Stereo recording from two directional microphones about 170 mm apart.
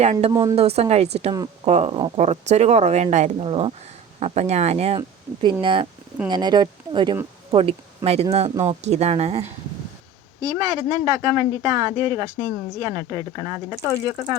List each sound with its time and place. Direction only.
0.0 s speech: 40° right (ahead or behind)
0.3 s speech: 20° right (ahead or behind)
0.5 s speech: 35° right (ahead or behind)
10.4 s speech: 20° right (ahead or behind)